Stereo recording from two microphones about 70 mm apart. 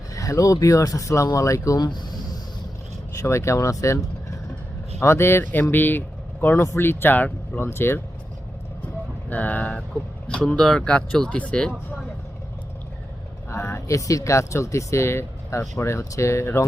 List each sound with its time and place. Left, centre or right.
0.1 s speech: left
1.8 s a sound: left
3.2 s speech: left
6.6 s speech: left
9.3 s speech: left
13.5 s speech: left